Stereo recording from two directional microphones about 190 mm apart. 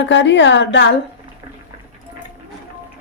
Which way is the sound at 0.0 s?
70° left (ahead or behind).